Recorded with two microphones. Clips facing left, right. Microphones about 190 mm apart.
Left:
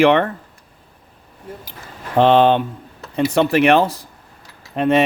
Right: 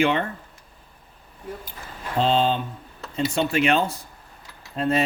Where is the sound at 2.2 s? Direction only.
70° left (ahead or behind).